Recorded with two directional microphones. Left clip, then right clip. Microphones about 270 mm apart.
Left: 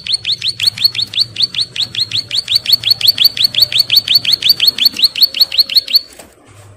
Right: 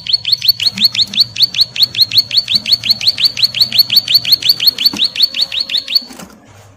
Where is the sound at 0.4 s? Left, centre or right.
Left.